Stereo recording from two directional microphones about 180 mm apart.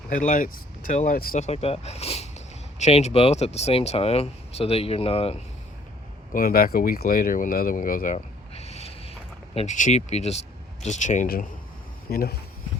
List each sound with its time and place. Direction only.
0.1 s speech: 50° left (ahead or behind)
1.5 s speech: 35° left (ahead or behind)
6.3 s speech: 55° left (ahead or behind)
12.1 s speech: 60° left (ahead or behind)